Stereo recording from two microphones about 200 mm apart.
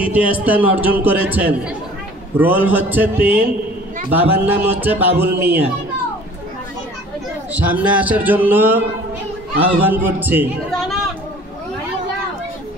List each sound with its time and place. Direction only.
0.0 s a man's voice: 10° right (ahead or behind)
7.5 s a man's voice: 5° right (ahead or behind)
10.8 s a sound: centre (ahead or behind)